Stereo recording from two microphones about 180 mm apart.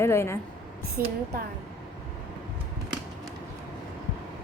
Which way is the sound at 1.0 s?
15° right (ahead or behind).